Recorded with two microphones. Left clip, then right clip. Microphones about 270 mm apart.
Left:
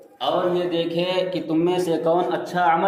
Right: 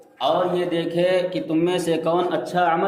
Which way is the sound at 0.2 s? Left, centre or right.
Right.